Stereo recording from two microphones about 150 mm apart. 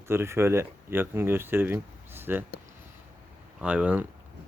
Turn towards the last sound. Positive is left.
turn(degrees=-10)  # may be behind; listen again after turning